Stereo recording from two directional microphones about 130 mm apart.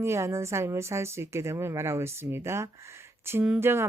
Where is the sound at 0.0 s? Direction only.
20° right (ahead or behind).